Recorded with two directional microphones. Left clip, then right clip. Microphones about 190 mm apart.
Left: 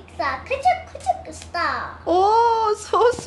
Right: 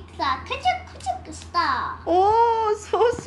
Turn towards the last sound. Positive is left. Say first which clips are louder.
# left 3 dB
turn(degrees=20)  # may be behind; listen again after turning